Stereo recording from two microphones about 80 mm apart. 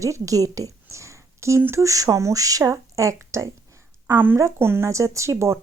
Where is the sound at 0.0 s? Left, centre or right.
Right.